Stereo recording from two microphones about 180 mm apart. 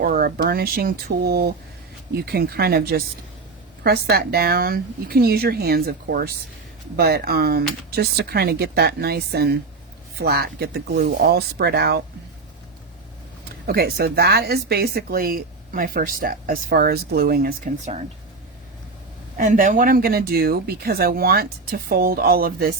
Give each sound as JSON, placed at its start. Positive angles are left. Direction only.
{"t": 0.0, "sound": "speech", "side_deg": -55}
{"t": 13.7, "sound": "speech", "side_deg": -55}
{"t": 19.4, "sound": "speech", "side_deg": -45}